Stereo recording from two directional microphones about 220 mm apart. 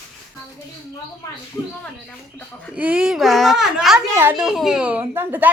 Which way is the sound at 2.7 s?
5° right (ahead or behind).